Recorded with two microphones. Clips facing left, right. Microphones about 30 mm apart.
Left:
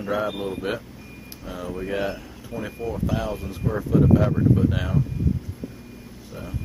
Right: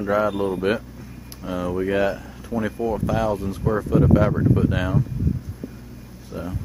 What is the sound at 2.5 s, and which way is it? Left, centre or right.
Speech, left.